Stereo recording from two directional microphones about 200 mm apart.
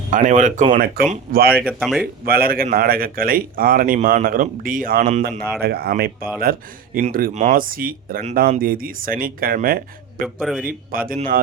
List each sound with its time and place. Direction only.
0.1 s speech: 40° right (ahead or behind)
1.5 s speech: 5° right (ahead or behind)
2.2 s speech: 50° right (ahead or behind)
10.2 s speech: 5° right (ahead or behind)
10.7 s speech: 45° right (ahead or behind)